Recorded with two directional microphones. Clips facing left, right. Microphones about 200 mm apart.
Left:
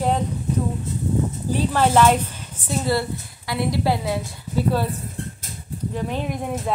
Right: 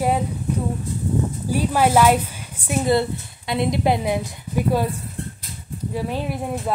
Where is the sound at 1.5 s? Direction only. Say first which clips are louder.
Right 1 dB; 10° right (ahead or behind).